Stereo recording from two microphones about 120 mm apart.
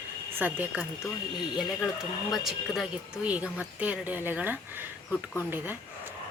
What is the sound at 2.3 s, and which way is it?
Speech, centre (ahead or behind).